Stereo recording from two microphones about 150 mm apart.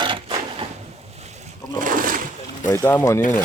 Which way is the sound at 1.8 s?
65° right (ahead or behind).